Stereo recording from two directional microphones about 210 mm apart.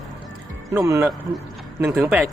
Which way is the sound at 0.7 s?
15° right (ahead or behind).